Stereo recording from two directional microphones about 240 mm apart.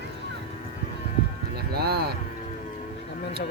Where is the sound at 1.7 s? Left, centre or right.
Right.